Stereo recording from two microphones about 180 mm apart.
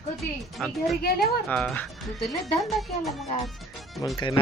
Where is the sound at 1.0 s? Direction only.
60° left (ahead or behind).